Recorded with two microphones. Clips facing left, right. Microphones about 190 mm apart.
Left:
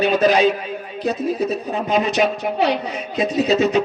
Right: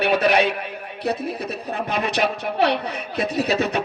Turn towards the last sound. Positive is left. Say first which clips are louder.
# left 5 dB
turn(degrees=-60)  # may be behind; listen again after turning